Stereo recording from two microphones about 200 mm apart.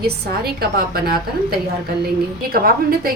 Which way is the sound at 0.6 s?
50° right (ahead or behind).